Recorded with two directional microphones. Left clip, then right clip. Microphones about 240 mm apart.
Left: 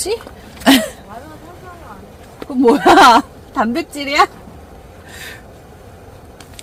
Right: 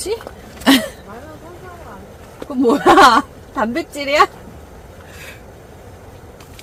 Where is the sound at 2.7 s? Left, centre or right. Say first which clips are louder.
Left 2 dB; left.